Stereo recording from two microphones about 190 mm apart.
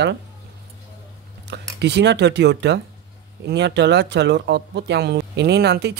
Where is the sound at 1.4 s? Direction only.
65° right (ahead or behind).